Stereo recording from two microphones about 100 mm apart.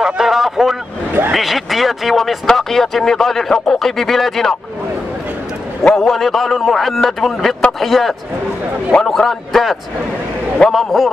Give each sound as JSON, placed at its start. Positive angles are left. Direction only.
{"t": 0.0, "sound": "vehicle", "side_deg": -5}
{"t": 1.3, "sound": "speech", "side_deg": 0}
{"t": 5.9, "sound": "speech", "side_deg": 0}